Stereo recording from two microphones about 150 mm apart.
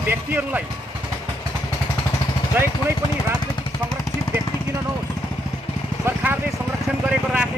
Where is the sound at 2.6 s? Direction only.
15° right (ahead or behind).